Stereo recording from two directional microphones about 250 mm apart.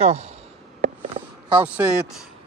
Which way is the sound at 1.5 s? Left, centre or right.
Centre.